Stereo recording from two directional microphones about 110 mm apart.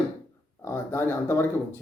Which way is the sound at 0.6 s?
20° left (ahead or behind).